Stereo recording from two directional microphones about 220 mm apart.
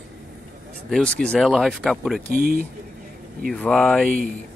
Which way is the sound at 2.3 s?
45° right (ahead or behind).